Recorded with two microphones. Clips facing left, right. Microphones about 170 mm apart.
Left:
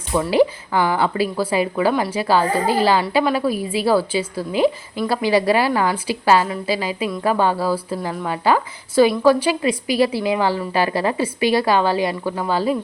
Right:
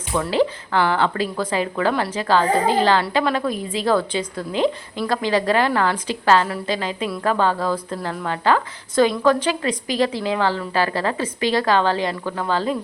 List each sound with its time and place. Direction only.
0.1 s speech: 15° left (ahead or behind)